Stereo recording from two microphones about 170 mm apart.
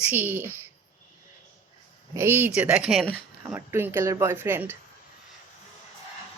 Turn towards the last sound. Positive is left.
turn(degrees=-15)  # may be behind; listen again after turning